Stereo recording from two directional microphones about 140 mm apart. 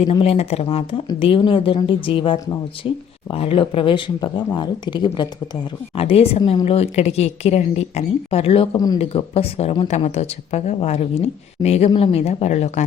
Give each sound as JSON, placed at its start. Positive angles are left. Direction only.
{"t": 0.0, "sound": "a woman's voice", "side_deg": 45}
{"t": 6.0, "sound": "a woman's voice", "side_deg": 45}